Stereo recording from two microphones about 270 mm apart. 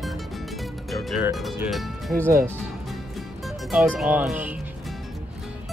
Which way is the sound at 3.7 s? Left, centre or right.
Centre.